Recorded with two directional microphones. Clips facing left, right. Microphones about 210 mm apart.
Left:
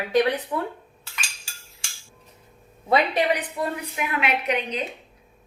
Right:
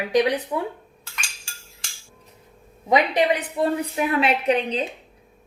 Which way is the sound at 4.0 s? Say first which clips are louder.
Right 3 dB; 30° right (ahead or behind).